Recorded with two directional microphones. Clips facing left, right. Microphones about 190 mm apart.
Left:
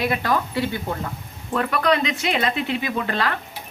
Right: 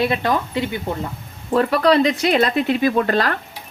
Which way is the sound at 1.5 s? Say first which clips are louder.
Right 5 dB; 35° right (ahead or behind).